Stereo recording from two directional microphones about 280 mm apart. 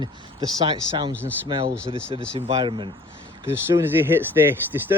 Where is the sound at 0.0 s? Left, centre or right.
Centre.